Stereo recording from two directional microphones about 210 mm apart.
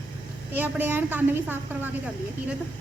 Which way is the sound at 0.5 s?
10° right (ahead or behind).